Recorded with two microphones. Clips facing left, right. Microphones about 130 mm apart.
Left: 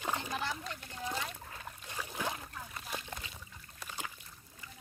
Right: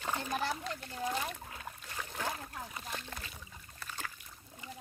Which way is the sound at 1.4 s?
5° right (ahead or behind).